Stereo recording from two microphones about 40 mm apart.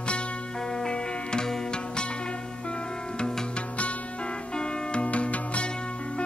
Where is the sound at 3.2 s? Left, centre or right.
Centre.